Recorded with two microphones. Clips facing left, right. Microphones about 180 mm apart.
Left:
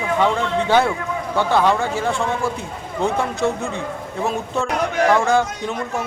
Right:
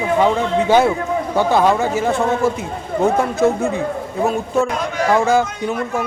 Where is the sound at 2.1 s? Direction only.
40° right (ahead or behind).